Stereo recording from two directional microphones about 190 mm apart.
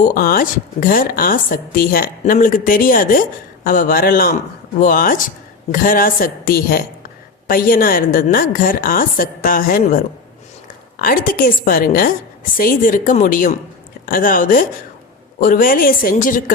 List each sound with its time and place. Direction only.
0.0 s a woman's voice: 50° left (ahead or behind)
11.0 s a woman's voice: 45° left (ahead or behind)